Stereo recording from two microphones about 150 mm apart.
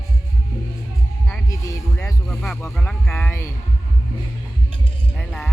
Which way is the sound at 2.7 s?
10° left (ahead or behind).